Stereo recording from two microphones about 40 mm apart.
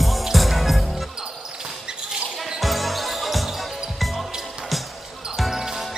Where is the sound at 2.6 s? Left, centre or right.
Centre.